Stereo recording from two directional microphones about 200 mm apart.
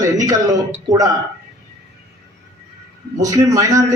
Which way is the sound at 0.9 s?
15° right (ahead or behind).